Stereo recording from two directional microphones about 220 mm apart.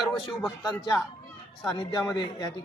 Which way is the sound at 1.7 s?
15° left (ahead or behind).